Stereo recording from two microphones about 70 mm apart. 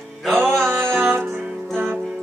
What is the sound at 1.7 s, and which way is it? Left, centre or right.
Music, right.